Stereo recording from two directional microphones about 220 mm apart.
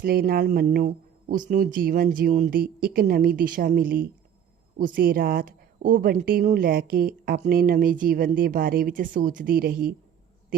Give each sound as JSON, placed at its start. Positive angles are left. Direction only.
{"t": 0.0, "sound": "speech", "side_deg": -45}